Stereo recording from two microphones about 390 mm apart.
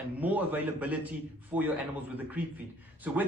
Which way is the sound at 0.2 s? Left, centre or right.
Centre.